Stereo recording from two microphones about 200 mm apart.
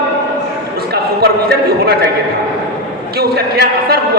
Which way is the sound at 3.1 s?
50° right (ahead or behind).